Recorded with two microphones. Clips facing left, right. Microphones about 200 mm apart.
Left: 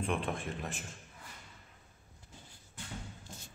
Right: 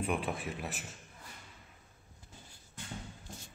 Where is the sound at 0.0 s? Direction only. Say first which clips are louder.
Even; 5° right (ahead or behind).